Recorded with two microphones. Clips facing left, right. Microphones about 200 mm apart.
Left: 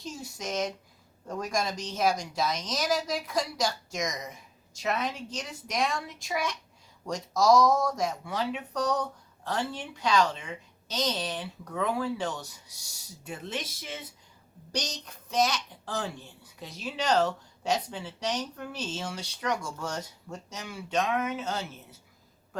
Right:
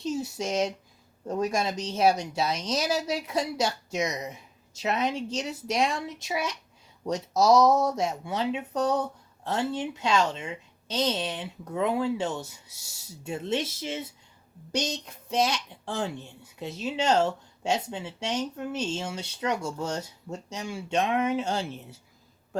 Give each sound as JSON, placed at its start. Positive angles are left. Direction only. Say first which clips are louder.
{"t": 0.1, "sound": "speech", "louder": "right 12 dB", "side_deg": -65}
{"t": 0.3, "sound": "speech", "louder": "right 4 dB", "side_deg": -30}